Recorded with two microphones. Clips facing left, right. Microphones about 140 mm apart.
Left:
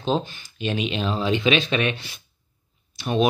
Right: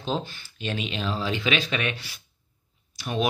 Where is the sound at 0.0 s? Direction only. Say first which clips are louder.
Left 5 dB; 20° left (ahead or behind).